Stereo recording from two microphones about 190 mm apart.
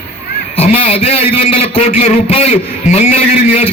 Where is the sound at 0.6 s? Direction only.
30° left (ahead or behind).